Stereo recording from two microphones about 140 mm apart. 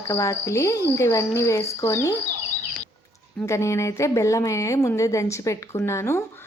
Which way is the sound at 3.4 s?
20° left (ahead or behind).